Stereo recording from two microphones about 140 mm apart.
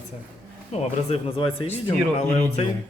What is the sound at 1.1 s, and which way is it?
Speech, 40° left (ahead or behind).